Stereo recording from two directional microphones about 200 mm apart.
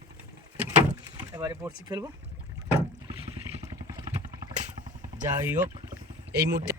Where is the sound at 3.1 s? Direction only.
25° right (ahead or behind).